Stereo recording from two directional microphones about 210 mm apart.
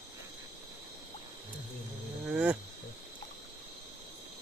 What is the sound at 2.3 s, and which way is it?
Wild animals, 5° right (ahead or behind).